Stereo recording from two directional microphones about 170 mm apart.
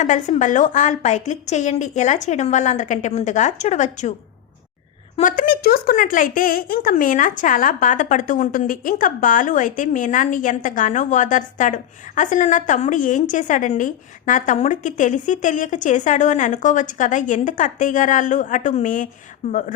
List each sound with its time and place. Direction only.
0.0 s speech: 45° left (ahead or behind)
5.2 s speech: 60° left (ahead or behind)